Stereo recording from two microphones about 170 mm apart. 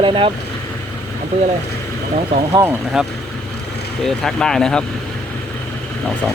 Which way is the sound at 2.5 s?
15° right (ahead or behind).